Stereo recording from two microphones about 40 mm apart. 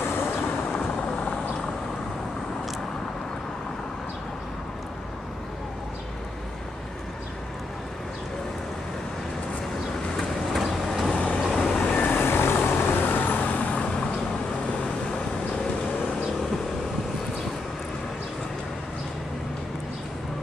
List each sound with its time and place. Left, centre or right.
0.0 s vehicle: left
1.0 s vehicle: left
10.5 s vehicle: centre
11.1 s vehicle: left
11.5 s vehicle: centre
11.9 s vehicle: left
12.2 s vehicle: left
12.8 s vehicle: left
13.6 s vehicle: left